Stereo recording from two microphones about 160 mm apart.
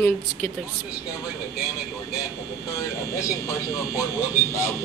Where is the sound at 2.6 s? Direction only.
20° left (ahead or behind).